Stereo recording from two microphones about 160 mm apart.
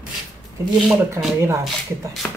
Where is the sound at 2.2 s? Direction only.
10° left (ahead or behind).